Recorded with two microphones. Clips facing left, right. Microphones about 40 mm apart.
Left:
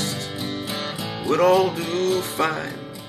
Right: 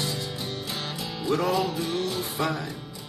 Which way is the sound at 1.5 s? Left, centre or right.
Left.